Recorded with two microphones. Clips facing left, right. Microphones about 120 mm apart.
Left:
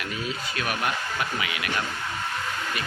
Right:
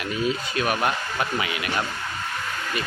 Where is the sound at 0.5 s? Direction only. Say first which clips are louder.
Right 4 dB; 25° right (ahead or behind).